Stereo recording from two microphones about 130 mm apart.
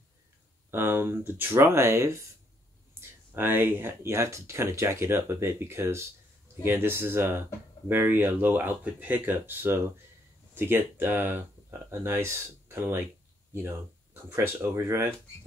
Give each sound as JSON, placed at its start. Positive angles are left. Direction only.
{"t": 0.7, "sound": "speech", "side_deg": -15}
{"t": 14.3, "sound": "speech", "side_deg": -20}